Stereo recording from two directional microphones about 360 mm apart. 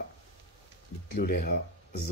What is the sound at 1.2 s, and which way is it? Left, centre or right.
Speech, left.